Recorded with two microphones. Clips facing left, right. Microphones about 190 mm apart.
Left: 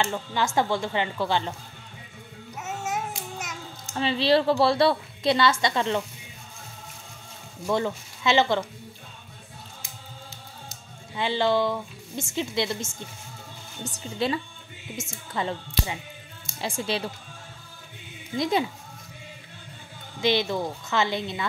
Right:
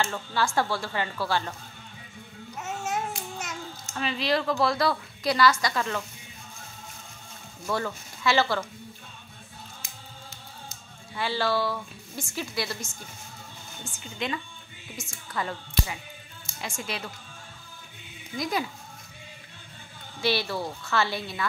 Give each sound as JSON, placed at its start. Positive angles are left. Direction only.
{"t": 0.0, "sound": "a woman's voice", "side_deg": 20}
{"t": 2.5, "sound": "babbling", "side_deg": 5}
{"t": 3.9, "sound": "a woman's voice", "side_deg": 30}
{"t": 7.6, "sound": "a woman's voice", "side_deg": 20}
{"t": 11.1, "sound": "a woman's voice", "side_deg": 20}
{"t": 13.8, "sound": "a woman's voice", "side_deg": 35}
{"t": 18.3, "sound": "a woman's voice", "side_deg": 25}
{"t": 20.2, "sound": "a woman's voice", "side_deg": 20}